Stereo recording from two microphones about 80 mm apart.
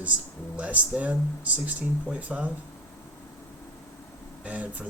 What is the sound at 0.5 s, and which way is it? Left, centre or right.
Speech, centre.